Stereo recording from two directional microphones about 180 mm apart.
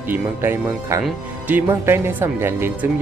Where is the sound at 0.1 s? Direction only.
10° right (ahead or behind).